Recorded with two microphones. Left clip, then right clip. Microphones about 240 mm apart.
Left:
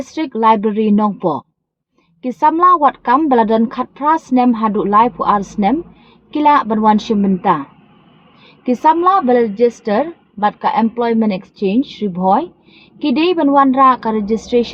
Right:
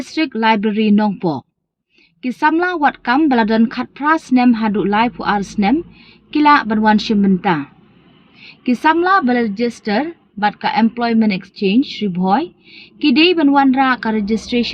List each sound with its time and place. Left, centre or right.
0.0 s a woman's voice: right